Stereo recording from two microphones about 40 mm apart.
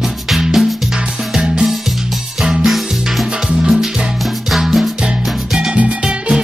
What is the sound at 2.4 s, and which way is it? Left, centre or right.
Music, centre.